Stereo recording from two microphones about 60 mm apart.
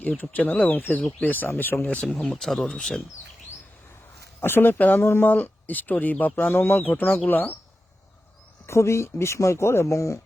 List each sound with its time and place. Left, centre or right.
0.3 s speech: left
1.8 s speech: centre
2.3 s speech: centre
4.4 s speech: left
8.6 s speech: left